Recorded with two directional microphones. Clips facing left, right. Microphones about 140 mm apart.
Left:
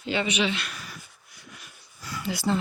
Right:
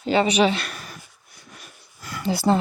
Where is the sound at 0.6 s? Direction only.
50° right (ahead or behind).